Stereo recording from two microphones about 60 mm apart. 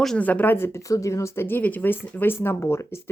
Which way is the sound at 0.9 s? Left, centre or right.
Left.